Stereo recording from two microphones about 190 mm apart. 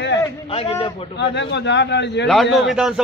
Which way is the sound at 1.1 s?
65° left (ahead or behind).